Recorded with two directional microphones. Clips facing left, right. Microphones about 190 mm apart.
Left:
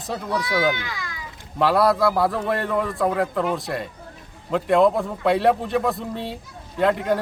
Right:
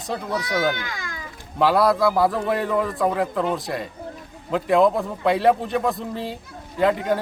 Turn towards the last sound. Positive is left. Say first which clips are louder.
# even
turn(degrees=0)  # may be behind; listen again after turning